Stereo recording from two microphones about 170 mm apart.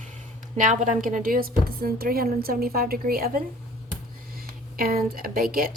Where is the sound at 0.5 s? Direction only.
50° right (ahead or behind).